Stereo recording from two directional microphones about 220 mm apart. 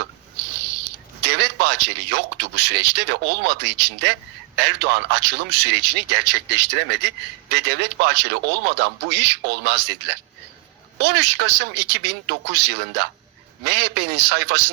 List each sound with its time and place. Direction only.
1.2 s a man's voice: 50° right (ahead or behind)